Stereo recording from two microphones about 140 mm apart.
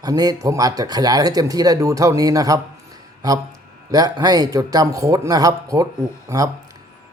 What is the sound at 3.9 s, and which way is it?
Speech, 25° right (ahead or behind).